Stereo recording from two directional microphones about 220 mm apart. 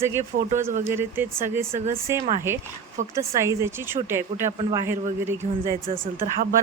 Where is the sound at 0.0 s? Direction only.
10° right (ahead or behind).